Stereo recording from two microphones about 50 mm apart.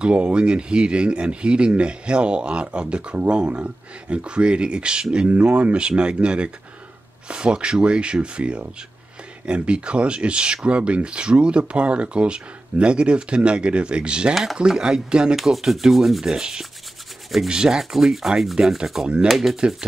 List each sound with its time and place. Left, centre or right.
0.0 s speech: right
14.3 s speech: centre
14.7 s speech: centre
15.3 s sanding: centre
19.2 s speech: centre